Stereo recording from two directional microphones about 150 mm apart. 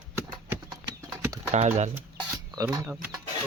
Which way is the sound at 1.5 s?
50° right (ahead or behind).